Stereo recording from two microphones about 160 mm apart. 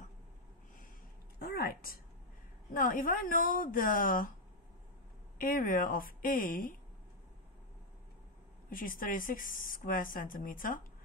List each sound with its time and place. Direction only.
1.4 s a sound: 75° left (ahead or behind)
2.7 s speech: 60° left (ahead or behind)
5.4 s speech: 60° left (ahead or behind)
8.6 s speech: 60° left (ahead or behind)